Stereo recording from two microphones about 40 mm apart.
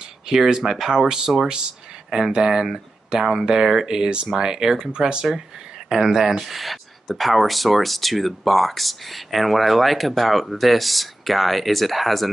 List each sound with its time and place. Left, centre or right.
0.3 s speech: centre